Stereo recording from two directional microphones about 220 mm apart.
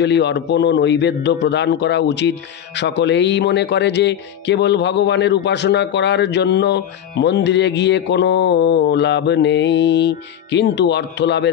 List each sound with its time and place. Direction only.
0.0 s speech: 50° left (ahead or behind)